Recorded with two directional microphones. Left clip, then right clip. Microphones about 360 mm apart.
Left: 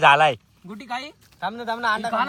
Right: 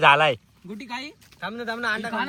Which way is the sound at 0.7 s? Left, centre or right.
Left.